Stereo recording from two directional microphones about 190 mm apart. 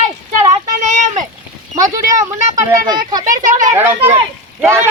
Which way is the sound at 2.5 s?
40° right (ahead or behind).